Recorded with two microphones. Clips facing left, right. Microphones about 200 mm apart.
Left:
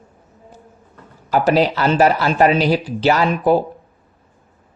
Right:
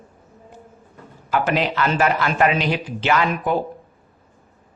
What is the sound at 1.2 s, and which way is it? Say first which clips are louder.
Speech: left 6 dB; 35° left (ahead or behind).